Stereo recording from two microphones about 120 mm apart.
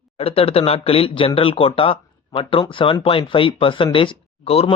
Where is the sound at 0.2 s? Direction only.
55° left (ahead or behind).